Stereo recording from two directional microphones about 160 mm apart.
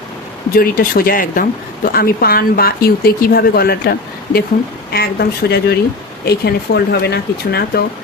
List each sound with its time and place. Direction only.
0.5 s speech: 65° left (ahead or behind); by 7.8 s 85° left